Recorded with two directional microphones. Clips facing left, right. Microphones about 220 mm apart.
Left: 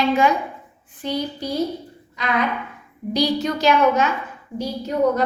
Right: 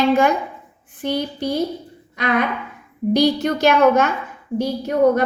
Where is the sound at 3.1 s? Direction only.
50° right (ahead or behind).